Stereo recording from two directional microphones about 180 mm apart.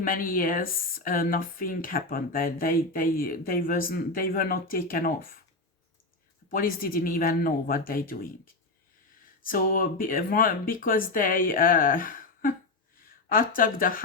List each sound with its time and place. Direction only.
0.0 s speech: 50° left (ahead or behind)
6.5 s speech: 55° left (ahead or behind)
9.4 s speech: 50° left (ahead or behind)